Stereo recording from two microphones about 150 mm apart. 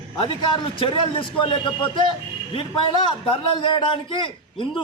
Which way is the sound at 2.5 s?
35° left (ahead or behind).